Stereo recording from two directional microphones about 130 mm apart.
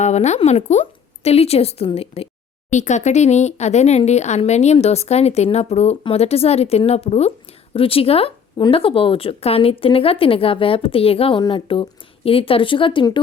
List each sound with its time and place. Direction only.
0.0 s a woman's voice: 60° left (ahead or behind)
2.6 s speech: 65° left (ahead or behind); by 13.1 s 40° left (ahead or behind)